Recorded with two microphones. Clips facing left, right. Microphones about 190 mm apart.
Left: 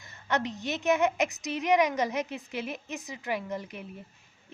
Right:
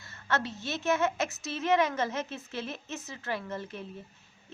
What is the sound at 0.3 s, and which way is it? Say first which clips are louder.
A woman's voice: left 2 dB; 15° left (ahead or behind).